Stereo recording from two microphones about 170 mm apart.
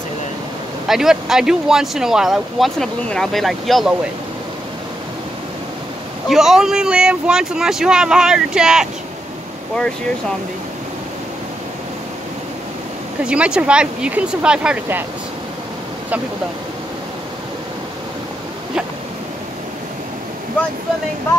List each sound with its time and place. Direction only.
0.8 s speech: 5° right (ahead or behind)
6.2 s speech: centre (ahead or behind)
13.2 s speech: 5° right (ahead or behind)